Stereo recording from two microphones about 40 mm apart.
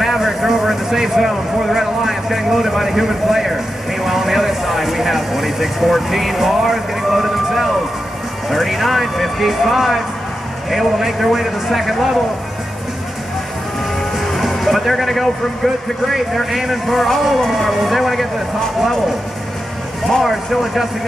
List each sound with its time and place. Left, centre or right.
0.0 s speech: centre
14.1 s speech: centre
20.1 s speech: centre